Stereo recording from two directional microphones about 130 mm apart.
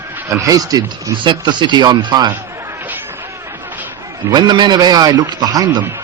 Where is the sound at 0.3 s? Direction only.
25° right (ahead or behind).